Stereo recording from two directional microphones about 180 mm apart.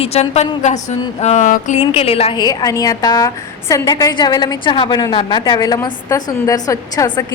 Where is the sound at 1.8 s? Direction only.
35° left (ahead or behind).